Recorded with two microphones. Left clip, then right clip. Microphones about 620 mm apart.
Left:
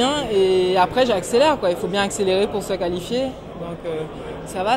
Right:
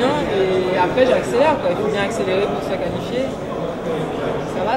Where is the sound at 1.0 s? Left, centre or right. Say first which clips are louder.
Right 2 dB; left.